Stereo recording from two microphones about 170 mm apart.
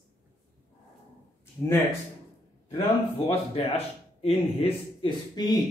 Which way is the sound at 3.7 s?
35° left (ahead or behind).